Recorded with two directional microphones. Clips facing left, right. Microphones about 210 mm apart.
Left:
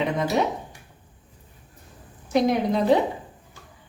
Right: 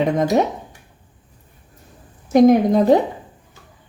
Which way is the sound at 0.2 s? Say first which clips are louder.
Right 6 dB; 45° right (ahead or behind).